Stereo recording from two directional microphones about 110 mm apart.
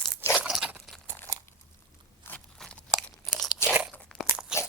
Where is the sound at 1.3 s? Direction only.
30° right (ahead or behind).